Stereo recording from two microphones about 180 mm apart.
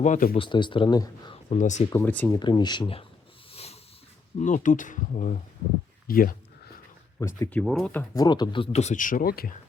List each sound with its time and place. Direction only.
0.0 s speech: 45° left (ahead or behind)
0.3 s speech: 25° left (ahead or behind)
1.5 s speech: 40° left (ahead or behind)
1.9 s speech: 10° left (ahead or behind)
2.4 s speech: 25° left (ahead or behind)
3.5 s snort: 35° left (ahead or behind)
4.4 s speech: 45° left (ahead or behind)
7.2 s speech: 15° left (ahead or behind)
7.6 s speech: centre (ahead or behind)
8.1 s speech: 20° left (ahead or behind); by 9.6 s 55° left (ahead or behind)